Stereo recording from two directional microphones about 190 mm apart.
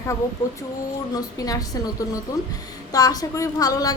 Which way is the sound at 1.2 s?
20° left (ahead or behind).